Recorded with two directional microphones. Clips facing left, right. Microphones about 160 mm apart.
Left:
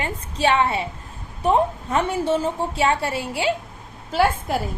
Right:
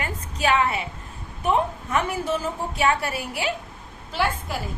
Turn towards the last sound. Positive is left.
turn(degrees=45)  # may be behind; listen again after turning